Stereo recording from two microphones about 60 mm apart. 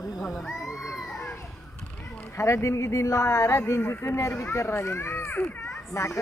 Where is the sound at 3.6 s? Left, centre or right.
Left.